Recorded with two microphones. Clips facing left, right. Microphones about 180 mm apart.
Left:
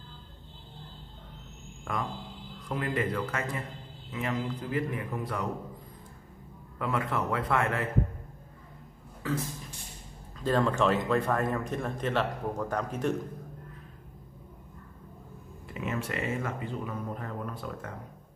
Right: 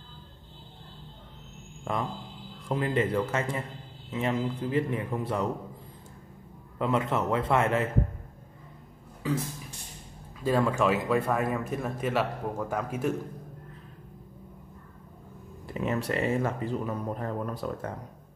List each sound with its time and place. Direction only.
1.9 s a man's voice: 25° right (ahead or behind)
6.8 s a man's voice: 25° right (ahead or behind)
9.2 s speech: 15° right (ahead or behind)
10.4 s speech: 10° right (ahead or behind)
15.7 s speech: 35° right (ahead or behind)